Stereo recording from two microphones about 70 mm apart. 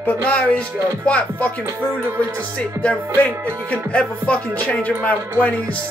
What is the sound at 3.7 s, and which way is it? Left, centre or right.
Speech, centre.